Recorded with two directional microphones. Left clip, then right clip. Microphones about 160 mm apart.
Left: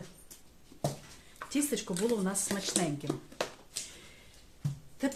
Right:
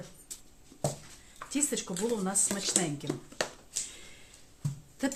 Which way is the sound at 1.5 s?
20° left (ahead or behind).